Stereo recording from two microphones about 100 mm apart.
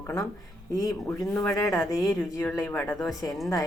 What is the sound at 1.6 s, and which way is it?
Speech, 35° left (ahead or behind).